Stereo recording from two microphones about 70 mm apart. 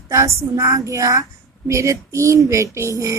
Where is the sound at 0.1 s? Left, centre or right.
Right.